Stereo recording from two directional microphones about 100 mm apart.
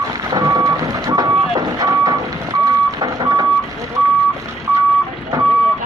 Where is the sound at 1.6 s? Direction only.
40° right (ahead or behind).